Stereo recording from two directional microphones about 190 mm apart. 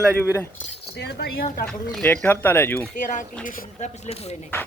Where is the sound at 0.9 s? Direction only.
60° left (ahead or behind).